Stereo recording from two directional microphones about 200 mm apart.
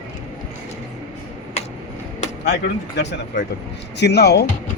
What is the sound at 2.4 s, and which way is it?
Speech, 55° left (ahead or behind).